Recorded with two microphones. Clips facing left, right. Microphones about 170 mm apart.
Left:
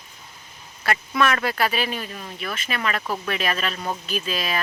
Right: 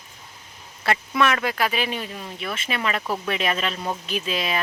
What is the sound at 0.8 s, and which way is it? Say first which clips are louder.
Quack: even; 25° right (ahead or behind).